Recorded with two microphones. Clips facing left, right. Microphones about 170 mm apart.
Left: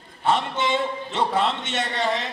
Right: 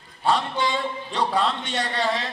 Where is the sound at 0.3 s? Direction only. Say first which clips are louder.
Left 1 dB; 25° left (ahead or behind).